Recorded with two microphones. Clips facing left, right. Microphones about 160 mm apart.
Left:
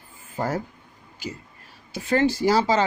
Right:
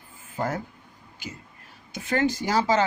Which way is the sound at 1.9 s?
30° left (ahead or behind).